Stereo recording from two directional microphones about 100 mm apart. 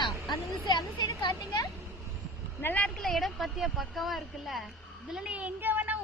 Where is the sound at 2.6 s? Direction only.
15° left (ahead or behind).